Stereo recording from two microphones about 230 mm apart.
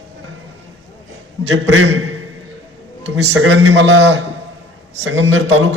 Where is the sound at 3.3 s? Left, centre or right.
Right.